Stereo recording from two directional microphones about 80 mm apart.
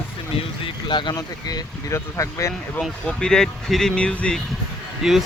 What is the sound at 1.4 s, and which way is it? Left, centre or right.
Speech, left.